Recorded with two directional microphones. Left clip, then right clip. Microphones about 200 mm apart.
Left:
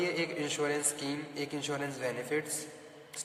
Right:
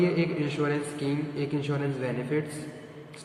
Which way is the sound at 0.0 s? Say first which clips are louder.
Right 6 dB; 55° left (ahead or behind).